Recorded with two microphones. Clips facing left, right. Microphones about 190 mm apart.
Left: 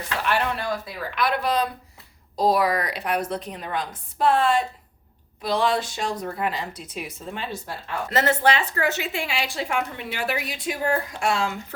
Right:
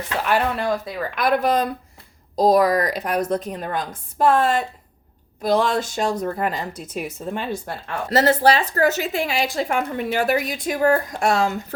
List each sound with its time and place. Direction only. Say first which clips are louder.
0.3 s a woman's voice: right 4 dB; 45° right (ahead or behind)
8.1 s a woman's voice: right 5 dB; 35° right (ahead or behind)